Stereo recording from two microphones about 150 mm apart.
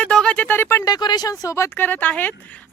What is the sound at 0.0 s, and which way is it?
Speech, 5° left (ahead or behind).